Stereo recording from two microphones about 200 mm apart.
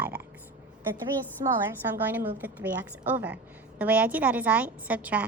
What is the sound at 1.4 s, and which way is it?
Speech, 20° right (ahead or behind).